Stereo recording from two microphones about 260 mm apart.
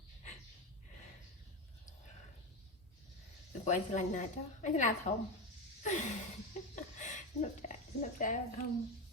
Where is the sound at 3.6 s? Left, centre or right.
Left.